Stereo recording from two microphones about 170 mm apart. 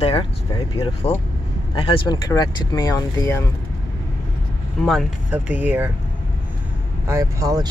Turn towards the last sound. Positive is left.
turn(degrees=-20)  # may be behind; listen again after turning